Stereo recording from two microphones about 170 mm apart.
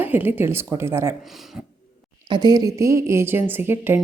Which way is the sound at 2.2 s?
25° right (ahead or behind).